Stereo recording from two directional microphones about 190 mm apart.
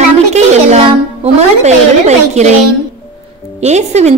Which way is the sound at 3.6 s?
35° right (ahead or behind).